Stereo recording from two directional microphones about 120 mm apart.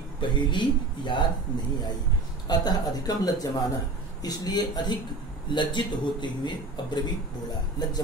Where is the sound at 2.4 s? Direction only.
35° left (ahead or behind).